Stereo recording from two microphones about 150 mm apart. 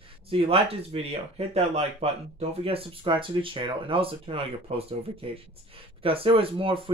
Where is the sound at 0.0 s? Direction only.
40° right (ahead or behind).